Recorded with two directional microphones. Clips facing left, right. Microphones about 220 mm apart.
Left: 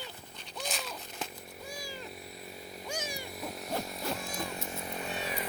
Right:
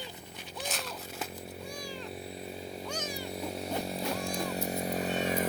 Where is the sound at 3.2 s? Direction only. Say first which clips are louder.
Right 4 dB; 30° right (ahead or behind).